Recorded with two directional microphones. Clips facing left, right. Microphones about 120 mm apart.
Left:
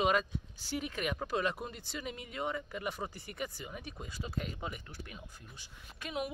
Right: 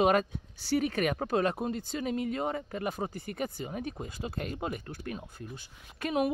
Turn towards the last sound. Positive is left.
turn(degrees=-50)  # may be behind; listen again after turning